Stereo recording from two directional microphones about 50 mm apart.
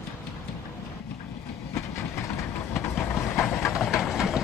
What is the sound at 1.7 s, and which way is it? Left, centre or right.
Train, left.